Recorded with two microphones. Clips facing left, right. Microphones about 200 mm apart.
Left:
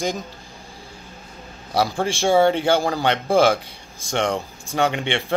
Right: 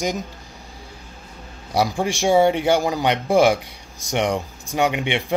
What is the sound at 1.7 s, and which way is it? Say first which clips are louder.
Speech: right 1 dB; 15° right (ahead or behind).